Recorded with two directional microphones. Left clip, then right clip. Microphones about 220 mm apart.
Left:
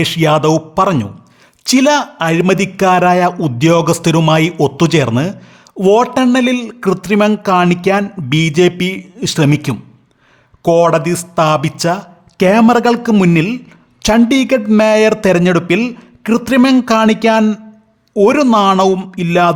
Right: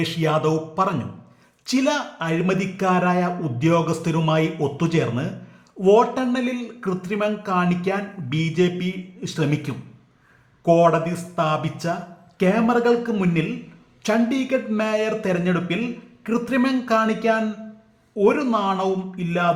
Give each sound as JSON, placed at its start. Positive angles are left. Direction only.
{"t": 0.0, "sound": "a man's voice", "side_deg": 45}